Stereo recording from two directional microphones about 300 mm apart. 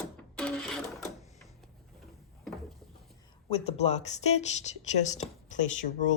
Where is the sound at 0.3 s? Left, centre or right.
Centre.